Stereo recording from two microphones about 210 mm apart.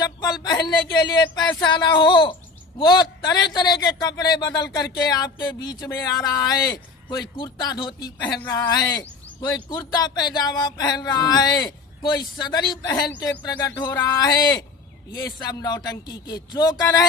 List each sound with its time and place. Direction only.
0.0 s speech: 20° left (ahead or behind)